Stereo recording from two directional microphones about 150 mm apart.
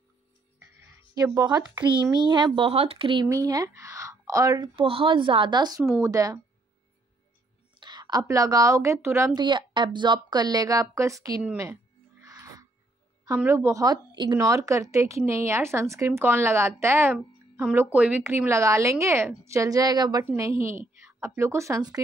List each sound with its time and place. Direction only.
0.7 s speech: 20° right (ahead or behind)
3.3 s a woman's voice: 20° right (ahead or behind)
7.8 s a woman's voice: 25° right (ahead or behind)
11.5 s music: 20° right (ahead or behind)
13.4 s a woman's voice: 15° right (ahead or behind)